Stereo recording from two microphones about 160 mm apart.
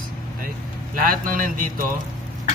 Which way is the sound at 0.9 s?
60° right (ahead or behind).